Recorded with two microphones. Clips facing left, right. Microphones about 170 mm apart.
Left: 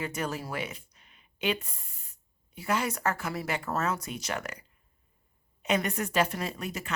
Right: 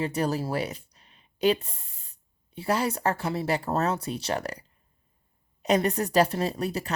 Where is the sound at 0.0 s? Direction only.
35° right (ahead or behind).